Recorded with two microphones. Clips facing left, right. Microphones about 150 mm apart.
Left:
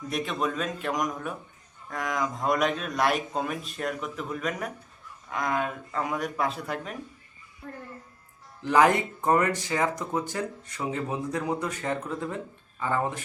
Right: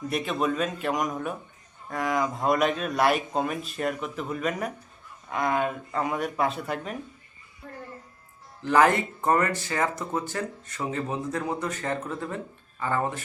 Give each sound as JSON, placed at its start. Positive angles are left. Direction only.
{"t": 0.1, "sound": "speech", "side_deg": 0}
{"t": 8.6, "sound": "speech", "side_deg": 15}